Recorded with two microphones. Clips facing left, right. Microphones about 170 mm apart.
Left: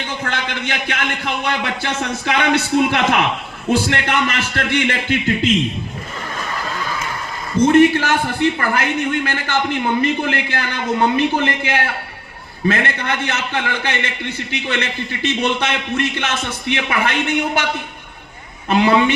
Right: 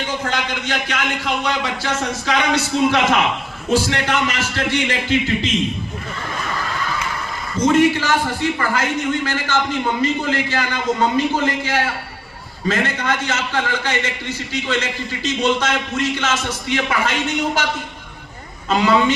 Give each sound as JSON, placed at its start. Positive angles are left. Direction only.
{"t": 0.3, "sound": "a man's voice", "side_deg": 55}
{"t": 7.7, "sound": "a man's voice", "side_deg": 60}
{"t": 18.7, "sound": "a man's voice", "side_deg": 60}